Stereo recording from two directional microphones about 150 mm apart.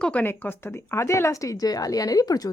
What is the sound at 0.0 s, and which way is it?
Speech, 10° left (ahead or behind).